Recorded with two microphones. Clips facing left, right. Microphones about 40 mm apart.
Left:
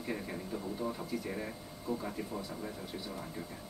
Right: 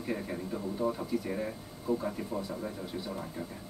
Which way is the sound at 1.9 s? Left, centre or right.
Centre.